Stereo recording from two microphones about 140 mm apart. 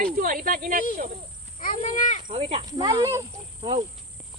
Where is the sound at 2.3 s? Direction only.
45° right (ahead or behind).